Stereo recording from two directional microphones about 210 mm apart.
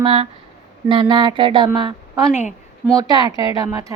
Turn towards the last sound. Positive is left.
turn(degrees=-15)  # may be behind; listen again after turning